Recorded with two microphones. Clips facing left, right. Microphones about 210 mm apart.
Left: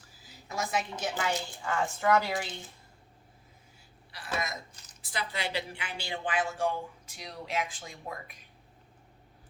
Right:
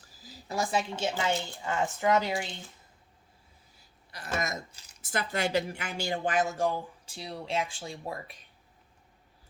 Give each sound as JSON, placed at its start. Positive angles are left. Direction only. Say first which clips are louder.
{"t": 0.2, "sound": "a woman's voice", "louder": "right 4 dB", "side_deg": -35}
{"t": 3.8, "sound": "a sound", "louder": "right 3 dB", "side_deg": -45}
{"t": 5.0, "sound": "a woman's voice", "louder": "right 5 dB", "side_deg": -45}